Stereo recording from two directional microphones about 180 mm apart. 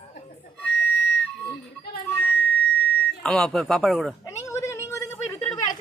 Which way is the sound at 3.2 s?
5° left (ahead or behind).